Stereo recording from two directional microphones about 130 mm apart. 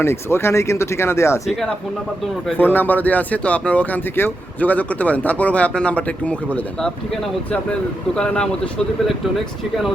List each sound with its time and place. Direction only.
0.0 s speech: 20° left (ahead or behind)
2.6 s speech: 15° left (ahead or behind); by 9.9 s centre (ahead or behind)